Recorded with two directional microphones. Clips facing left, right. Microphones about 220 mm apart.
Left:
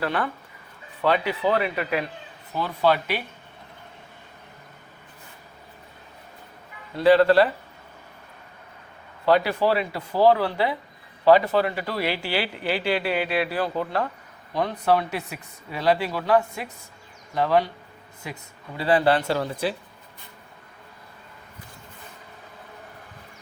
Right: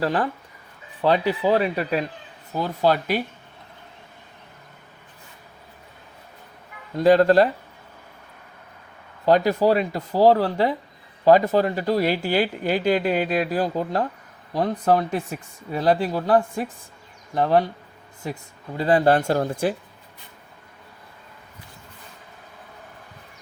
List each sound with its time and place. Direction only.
0.0 s speech: 35° right (ahead or behind)
6.9 s speech: 45° right (ahead or behind)
9.2 s speech: 40° right (ahead or behind)